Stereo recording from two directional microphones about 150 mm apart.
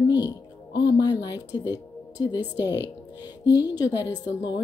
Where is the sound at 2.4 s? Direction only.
15° right (ahead or behind).